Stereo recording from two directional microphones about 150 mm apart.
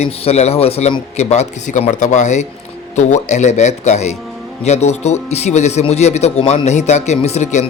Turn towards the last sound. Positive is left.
turn(degrees=50)  # may be behind; listen again after turning